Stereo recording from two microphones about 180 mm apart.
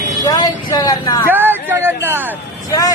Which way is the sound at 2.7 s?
20° left (ahead or behind).